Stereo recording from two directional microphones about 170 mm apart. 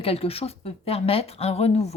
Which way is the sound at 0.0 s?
35° left (ahead or behind).